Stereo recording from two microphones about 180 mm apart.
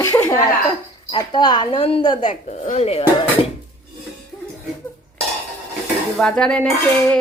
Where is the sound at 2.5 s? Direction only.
40° left (ahead or behind).